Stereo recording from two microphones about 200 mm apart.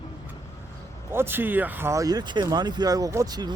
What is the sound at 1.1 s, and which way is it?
Speech, 10° right (ahead or behind).